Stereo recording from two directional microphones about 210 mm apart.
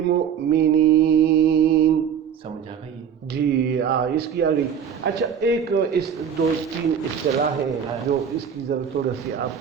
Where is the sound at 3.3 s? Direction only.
50° right (ahead or behind).